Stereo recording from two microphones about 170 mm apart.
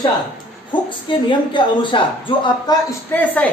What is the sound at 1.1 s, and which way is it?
A woman's voice, 30° left (ahead or behind).